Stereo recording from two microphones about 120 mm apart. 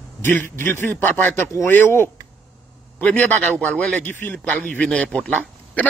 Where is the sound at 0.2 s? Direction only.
20° left (ahead or behind).